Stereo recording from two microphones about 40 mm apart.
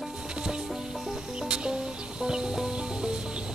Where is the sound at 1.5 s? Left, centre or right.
Right.